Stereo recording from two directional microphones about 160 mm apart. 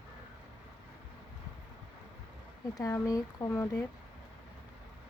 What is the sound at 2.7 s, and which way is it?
Speech, 20° left (ahead or behind).